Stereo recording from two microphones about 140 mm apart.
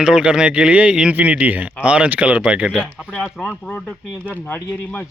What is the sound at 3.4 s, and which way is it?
Speech, 10° left (ahead or behind).